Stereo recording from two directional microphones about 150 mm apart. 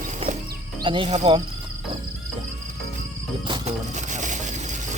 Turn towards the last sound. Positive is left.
turn(degrees=-55)  # may be behind; listen again after turning